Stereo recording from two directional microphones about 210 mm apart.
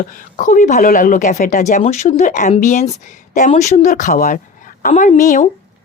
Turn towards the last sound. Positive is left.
turn(degrees=35)  # may be behind; listen again after turning